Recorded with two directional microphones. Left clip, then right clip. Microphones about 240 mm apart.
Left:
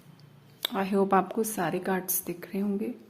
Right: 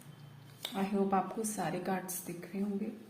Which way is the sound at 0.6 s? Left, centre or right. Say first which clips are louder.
Left 8 dB; left.